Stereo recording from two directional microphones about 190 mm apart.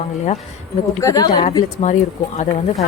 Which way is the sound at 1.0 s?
20° left (ahead or behind).